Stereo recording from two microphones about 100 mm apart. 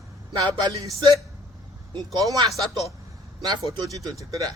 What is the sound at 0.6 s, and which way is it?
Speech, 40° right (ahead or behind).